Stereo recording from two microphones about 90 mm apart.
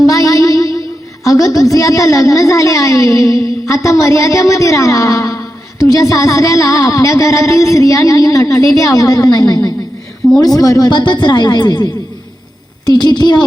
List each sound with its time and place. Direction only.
0.0 s a woman's voice: 40° left (ahead or behind)